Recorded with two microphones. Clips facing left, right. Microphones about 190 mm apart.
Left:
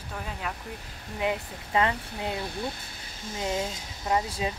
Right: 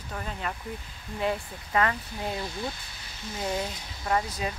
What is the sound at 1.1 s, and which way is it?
Speech, 20° left (ahead or behind).